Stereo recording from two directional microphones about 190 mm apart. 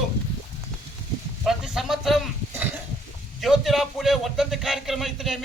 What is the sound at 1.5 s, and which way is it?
Speech, centre (ahead or behind).